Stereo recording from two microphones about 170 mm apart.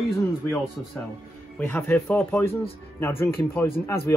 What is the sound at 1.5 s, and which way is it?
Speech, 10° left (ahead or behind).